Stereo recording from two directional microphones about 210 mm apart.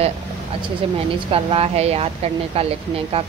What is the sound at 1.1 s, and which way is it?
Speech, 25° right (ahead or behind).